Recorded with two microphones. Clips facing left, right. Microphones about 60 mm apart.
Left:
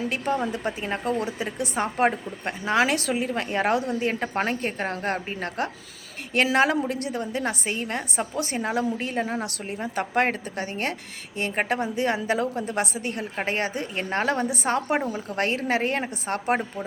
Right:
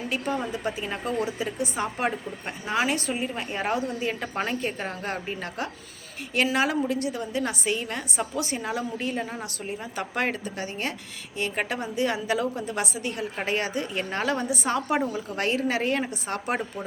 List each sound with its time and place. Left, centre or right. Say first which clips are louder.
0.1 s a woman's voice: left 2 dB; left
2.6 s a woman's voice: left 3 dB; left
6.3 s a woman's voice: left 3 dB; left
9.8 s a woman's voice: left 5 dB; left